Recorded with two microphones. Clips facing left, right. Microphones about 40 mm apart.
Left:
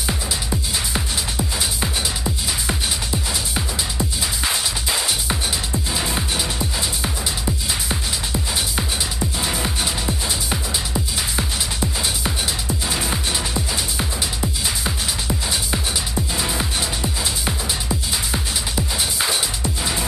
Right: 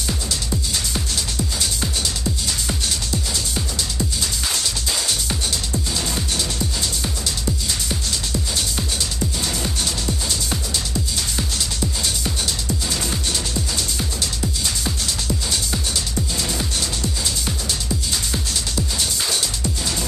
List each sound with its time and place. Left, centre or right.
0.0 s music: left
3.1 s music: left